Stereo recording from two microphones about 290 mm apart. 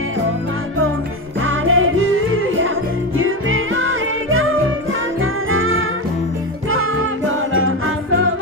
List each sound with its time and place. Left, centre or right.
1.4 s music: right